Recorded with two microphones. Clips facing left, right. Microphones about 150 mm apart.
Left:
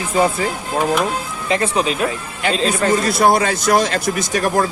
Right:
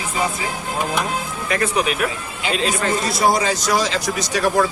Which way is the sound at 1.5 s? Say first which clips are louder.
Left 2 dB; 25° left (ahead or behind).